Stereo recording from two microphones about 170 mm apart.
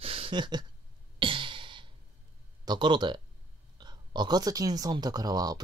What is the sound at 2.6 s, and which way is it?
Speech, 25° right (ahead or behind).